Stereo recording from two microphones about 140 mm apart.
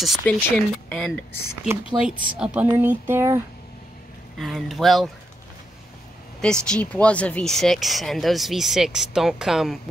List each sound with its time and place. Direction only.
0.0 s speech: 5° left (ahead or behind)
1.7 s speech: 10° right (ahead or behind)
4.4 s speech: centre (ahead or behind)
6.4 s speech: 5° left (ahead or behind)